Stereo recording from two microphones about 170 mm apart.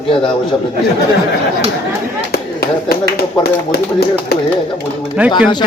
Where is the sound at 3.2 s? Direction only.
65° left (ahead or behind).